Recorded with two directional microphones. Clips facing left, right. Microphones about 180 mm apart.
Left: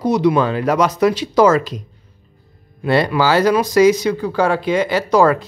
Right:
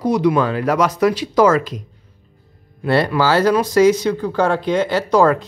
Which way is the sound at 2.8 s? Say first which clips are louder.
Left 1 dB; 15° left (ahead or behind).